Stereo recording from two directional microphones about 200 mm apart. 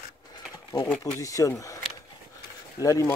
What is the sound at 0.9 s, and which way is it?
Speech, 10° left (ahead or behind).